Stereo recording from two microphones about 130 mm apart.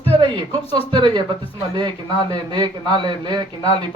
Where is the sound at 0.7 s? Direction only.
35° right (ahead or behind).